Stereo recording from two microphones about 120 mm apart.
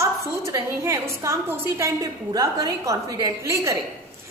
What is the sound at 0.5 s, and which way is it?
A woman's voice, 25° right (ahead or behind).